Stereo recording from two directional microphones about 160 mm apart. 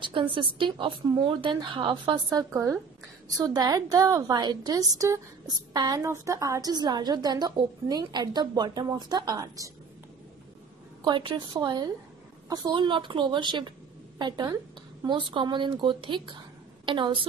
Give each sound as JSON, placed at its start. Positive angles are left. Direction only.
{"t": 0.0, "sound": "speech", "side_deg": -30}
{"t": 2.3, "sound": "a woman's voice", "side_deg": -15}
{"t": 11.1, "sound": "a woman's voice", "side_deg": -30}